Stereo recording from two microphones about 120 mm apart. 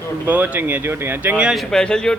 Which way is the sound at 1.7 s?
5° left (ahead or behind).